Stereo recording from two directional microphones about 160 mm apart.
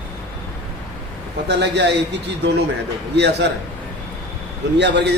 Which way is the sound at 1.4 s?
90° right.